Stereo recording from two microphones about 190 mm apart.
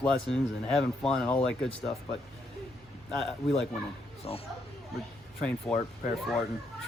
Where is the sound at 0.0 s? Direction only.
5° left (ahead or behind).